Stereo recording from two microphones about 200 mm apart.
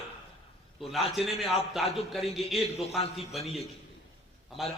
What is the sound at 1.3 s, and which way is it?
A man's voice, centre (ahead or behind).